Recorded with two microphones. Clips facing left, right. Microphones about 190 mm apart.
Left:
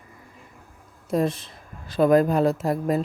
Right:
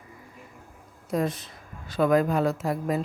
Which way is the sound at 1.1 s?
30° left (ahead or behind).